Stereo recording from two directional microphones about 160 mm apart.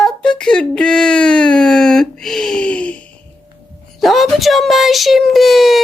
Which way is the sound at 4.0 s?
Centre (ahead or behind).